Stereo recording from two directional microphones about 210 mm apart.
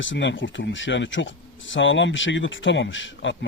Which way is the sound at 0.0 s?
60° left (ahead or behind).